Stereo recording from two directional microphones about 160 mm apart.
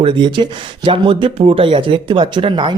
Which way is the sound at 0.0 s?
30° right (ahead or behind).